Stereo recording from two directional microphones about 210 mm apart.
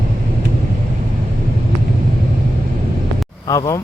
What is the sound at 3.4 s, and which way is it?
Speech, 15° left (ahead or behind).